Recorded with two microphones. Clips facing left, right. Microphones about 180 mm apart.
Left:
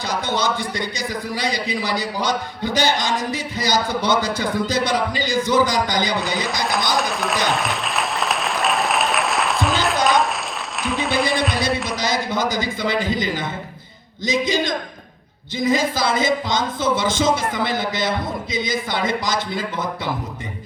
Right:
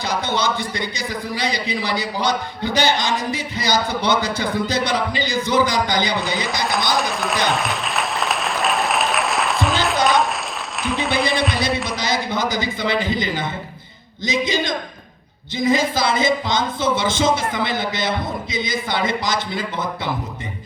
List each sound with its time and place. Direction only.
0.1 s a man's voice: 50° left (ahead or behind)
6.1 s speech: centre (ahead or behind)
6.9 s applause: centre (ahead or behind)
11.9 s a man's voice: 50° left (ahead or behind)